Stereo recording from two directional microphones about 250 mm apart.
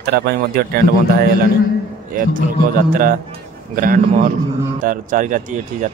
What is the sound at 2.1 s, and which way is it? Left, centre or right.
Speech, right.